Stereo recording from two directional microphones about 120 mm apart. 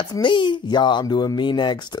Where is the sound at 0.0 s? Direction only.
35° left (ahead or behind).